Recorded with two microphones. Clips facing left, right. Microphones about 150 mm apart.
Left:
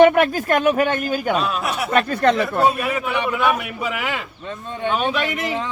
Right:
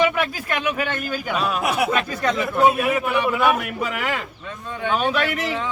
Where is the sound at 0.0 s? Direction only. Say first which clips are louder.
Left 8 dB; 55° left (ahead or behind).